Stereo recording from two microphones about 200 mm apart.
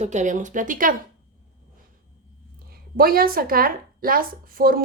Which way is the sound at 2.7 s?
50° right (ahead or behind).